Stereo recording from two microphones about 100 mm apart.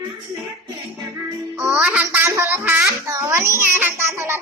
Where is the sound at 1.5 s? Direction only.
10° right (ahead or behind).